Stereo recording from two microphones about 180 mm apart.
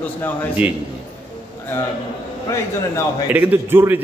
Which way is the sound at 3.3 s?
10° right (ahead or behind).